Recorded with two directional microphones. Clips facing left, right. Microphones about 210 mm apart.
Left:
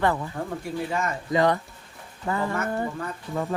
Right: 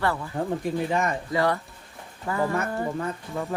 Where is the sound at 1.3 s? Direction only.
20° left (ahead or behind).